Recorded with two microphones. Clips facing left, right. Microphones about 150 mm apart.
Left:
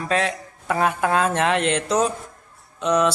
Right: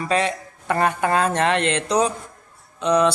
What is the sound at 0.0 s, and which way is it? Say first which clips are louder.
Speech: right 1 dB; centre (ahead or behind).